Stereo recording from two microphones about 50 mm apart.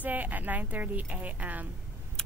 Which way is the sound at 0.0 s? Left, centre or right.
Right.